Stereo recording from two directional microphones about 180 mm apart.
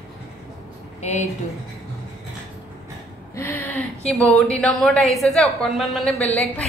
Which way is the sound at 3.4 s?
10° left (ahead or behind).